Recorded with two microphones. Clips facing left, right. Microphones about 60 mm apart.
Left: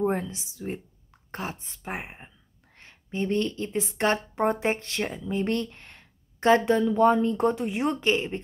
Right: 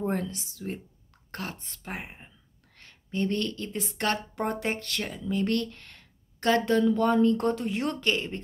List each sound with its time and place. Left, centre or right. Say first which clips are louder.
0.0 s a woman's voice: left 3 dB; centre